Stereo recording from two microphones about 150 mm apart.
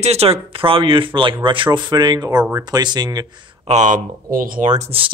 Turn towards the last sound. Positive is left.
turn(degrees=-45)  # may be behind; listen again after turning